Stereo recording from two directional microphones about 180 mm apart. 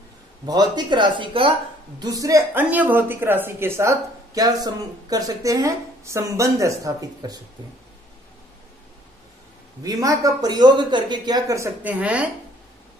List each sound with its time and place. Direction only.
0.5 s a woman's voice: 25° right (ahead or behind)
9.8 s speech: 20° right (ahead or behind)